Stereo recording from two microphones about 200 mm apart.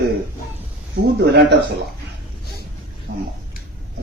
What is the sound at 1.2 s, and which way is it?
Speech, 55° right (ahead or behind).